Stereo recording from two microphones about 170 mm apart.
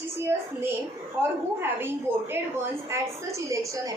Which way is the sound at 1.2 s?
15° right (ahead or behind).